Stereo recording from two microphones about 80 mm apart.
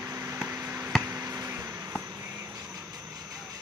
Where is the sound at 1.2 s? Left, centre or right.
Right.